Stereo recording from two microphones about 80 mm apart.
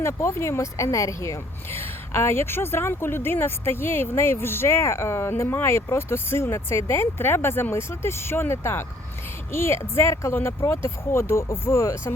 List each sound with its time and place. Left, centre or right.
0.0 s a woman's voice: left